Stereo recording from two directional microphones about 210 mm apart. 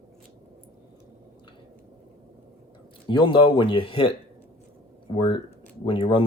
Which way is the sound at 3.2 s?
25° left (ahead or behind).